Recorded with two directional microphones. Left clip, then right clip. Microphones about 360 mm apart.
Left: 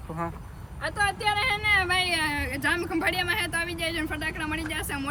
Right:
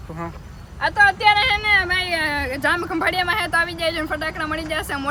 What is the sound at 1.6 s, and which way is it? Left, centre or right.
Speech, centre.